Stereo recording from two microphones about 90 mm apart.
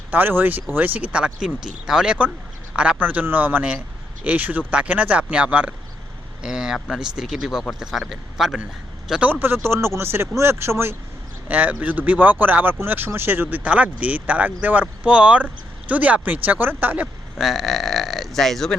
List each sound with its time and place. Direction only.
0.1 s speech: 20° right (ahead or behind)
9.3 s speech: 25° right (ahead or behind)
17.3 s speech: centre (ahead or behind)